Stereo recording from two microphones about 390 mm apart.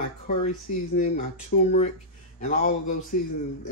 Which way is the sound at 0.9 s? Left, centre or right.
Left.